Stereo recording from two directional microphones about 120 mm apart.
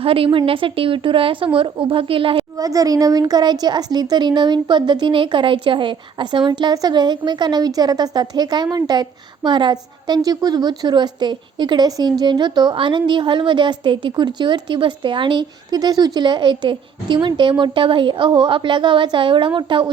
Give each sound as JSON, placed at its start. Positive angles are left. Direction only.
{"t": 0.0, "sound": "a woman's voice", "side_deg": -50}
{"t": 2.6, "sound": "a woman's voice", "side_deg": -30}